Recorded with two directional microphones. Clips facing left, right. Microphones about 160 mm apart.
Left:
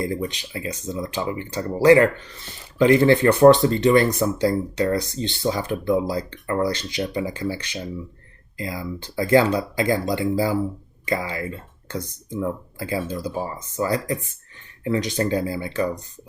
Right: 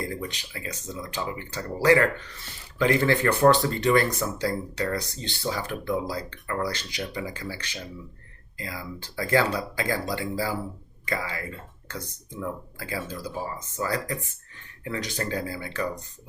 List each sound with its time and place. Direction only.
0.1 s speech: 25° left (ahead or behind)